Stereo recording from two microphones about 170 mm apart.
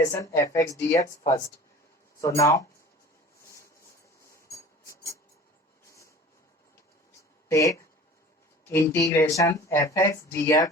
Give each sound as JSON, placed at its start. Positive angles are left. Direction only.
{"t": 0.1, "sound": "speech", "side_deg": 15}
{"t": 4.2, "sound": "a sound", "side_deg": 20}
{"t": 7.4, "sound": "speech", "side_deg": 20}